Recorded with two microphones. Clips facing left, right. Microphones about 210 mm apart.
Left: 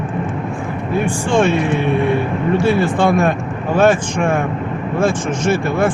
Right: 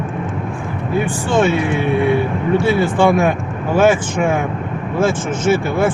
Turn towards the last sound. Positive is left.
turn(degrees=-5)  # may be behind; listen again after turning